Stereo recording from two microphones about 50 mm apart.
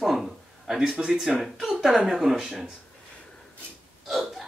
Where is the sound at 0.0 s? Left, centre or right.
Centre.